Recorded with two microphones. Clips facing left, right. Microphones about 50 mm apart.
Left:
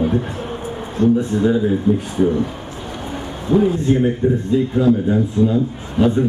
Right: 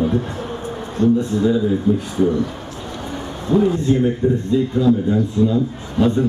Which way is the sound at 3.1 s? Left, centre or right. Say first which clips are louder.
Left 1 dB; left.